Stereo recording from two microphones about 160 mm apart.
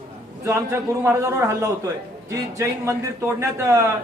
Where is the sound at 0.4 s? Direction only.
15° right (ahead or behind).